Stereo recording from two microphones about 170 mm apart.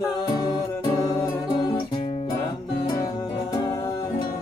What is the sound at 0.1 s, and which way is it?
Music, 25° left (ahead or behind).